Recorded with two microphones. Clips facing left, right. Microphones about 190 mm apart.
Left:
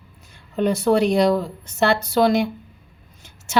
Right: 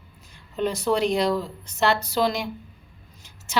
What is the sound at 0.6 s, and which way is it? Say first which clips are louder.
A woman's voice: left 5 dB; 55° left (ahead or behind).